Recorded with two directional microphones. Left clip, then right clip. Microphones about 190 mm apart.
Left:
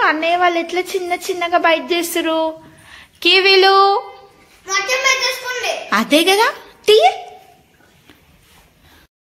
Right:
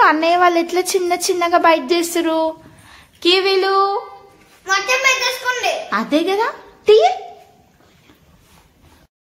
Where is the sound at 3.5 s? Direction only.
25° left (ahead or behind).